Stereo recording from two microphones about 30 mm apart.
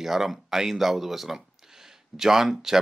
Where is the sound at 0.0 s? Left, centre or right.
Centre.